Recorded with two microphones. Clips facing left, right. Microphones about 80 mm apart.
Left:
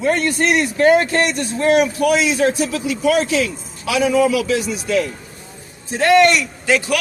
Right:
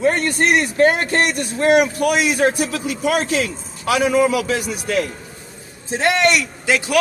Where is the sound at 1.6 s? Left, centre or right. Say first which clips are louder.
Even; right.